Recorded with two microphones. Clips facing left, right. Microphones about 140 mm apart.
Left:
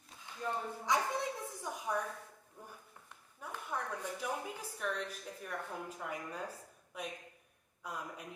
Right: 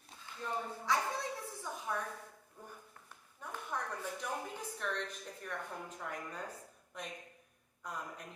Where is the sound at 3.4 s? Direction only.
10° left (ahead or behind).